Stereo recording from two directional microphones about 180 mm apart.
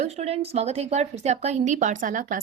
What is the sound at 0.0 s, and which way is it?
Speech, 35° right (ahead or behind).